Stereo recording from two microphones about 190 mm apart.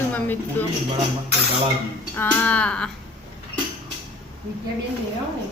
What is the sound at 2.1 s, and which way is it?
Speech, 10° left (ahead or behind).